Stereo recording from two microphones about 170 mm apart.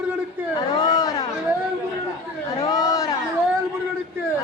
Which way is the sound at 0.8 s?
25° left (ahead or behind).